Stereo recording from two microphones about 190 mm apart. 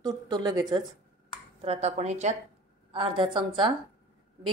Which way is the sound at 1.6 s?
35° right (ahead or behind).